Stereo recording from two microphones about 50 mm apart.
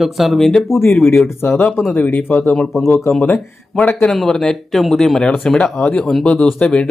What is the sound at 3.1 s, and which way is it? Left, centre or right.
Speech, left.